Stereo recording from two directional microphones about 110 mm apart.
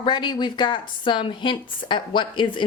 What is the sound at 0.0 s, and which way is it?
Speech, 45° left (ahead or behind).